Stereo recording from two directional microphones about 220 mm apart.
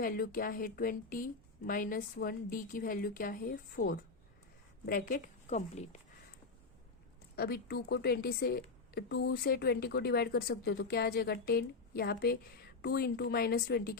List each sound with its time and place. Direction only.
0.0 s a woman's voice: 40° left (ahead or behind)
7.3 s a woman's voice: 45° left (ahead or behind)